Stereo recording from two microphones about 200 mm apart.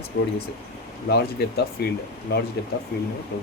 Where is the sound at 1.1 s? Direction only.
55° left (ahead or behind).